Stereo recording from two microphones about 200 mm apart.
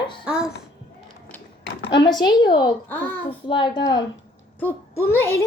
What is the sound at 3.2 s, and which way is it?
Speech, 25° left (ahead or behind).